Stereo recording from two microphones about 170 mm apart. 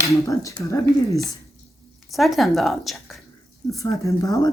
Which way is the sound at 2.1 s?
Centre (ahead or behind).